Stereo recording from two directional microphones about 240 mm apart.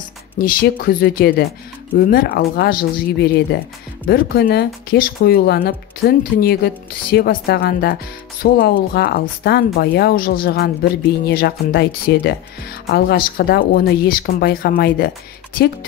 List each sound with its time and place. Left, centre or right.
0.4 s speech: left